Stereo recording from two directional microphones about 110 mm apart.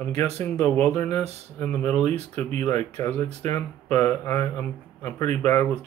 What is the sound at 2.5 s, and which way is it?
Speech, 90° right.